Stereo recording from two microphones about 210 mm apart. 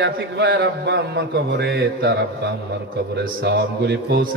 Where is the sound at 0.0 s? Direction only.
55° right (ahead or behind).